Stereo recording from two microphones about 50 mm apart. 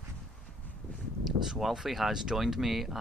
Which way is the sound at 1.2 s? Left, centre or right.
Centre.